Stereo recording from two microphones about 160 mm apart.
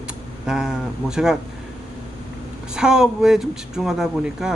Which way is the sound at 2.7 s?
5° right (ahead or behind).